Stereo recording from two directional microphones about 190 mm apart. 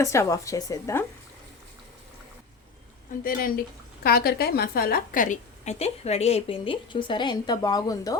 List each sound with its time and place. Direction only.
0.0 s speech: 15° left (ahead or behind)
3.2 s a woman's voice: 45° left (ahead or behind); by 8.1 s 20° left (ahead or behind)